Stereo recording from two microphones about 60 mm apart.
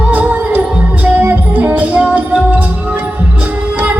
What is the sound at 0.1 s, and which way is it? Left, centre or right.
Music, right.